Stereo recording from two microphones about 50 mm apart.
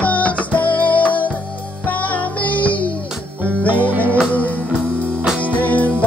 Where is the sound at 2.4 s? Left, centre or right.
Left.